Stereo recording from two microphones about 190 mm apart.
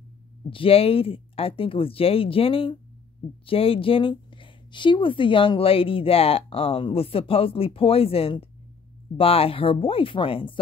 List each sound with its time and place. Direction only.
0.5 s a woman's voice: 30° left (ahead or behind)